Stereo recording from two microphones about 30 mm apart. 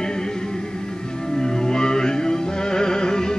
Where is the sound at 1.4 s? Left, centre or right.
Left.